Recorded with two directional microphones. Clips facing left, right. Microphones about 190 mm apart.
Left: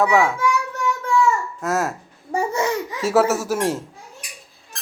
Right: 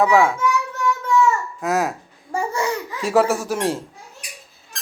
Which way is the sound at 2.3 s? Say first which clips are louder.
Left 2 dB; 20° left (ahead or behind).